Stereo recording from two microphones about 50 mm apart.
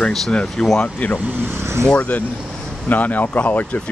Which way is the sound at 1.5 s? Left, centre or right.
Right.